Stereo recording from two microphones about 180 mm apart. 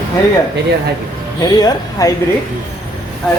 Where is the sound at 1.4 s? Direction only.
20° left (ahead or behind).